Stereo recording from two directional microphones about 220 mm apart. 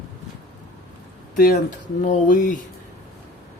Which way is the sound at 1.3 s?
40° left (ahead or behind).